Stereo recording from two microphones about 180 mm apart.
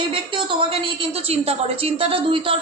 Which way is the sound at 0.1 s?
30° right (ahead or behind).